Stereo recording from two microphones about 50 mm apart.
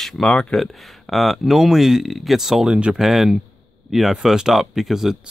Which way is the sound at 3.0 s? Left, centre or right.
Centre.